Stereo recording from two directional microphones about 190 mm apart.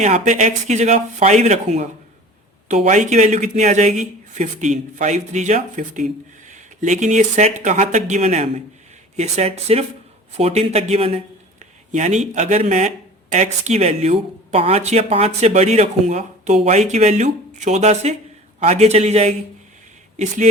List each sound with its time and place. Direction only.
0.0 s speech: 40° right (ahead or behind)